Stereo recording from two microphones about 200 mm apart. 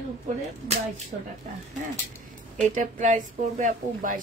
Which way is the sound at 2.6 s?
35° right (ahead or behind).